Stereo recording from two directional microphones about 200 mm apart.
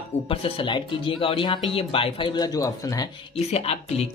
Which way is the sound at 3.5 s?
30° left (ahead or behind).